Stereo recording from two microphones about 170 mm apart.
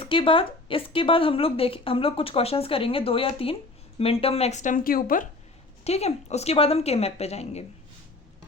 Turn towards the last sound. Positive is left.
turn(degrees=40)  # may be behind; listen again after turning